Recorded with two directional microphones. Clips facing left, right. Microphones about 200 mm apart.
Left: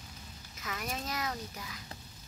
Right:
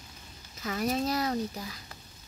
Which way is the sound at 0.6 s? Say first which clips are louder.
Right 10 dB; 35° right (ahead or behind).